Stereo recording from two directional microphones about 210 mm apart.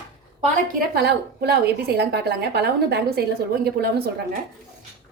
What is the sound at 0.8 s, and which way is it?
A woman's voice, 50° right (ahead or behind).